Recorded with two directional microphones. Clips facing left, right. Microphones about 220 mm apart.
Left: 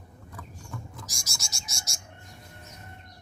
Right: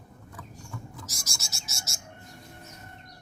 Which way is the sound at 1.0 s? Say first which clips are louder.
Right 1 dB; 15° left (ahead or behind).